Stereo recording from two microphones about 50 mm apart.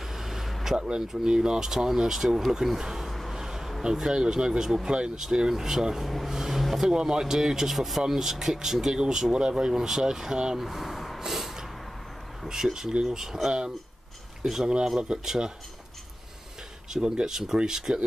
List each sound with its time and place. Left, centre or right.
0.1 s vehicle: centre
0.7 s speech: centre
3.1 s vehicle: centre
3.3 s speech: centre
10.6 s a sound: centre
12.4 s speech: centre
16.9 s speech: centre